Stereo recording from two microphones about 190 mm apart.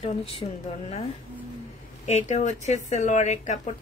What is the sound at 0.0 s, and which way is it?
Speech, 30° left (ahead or behind).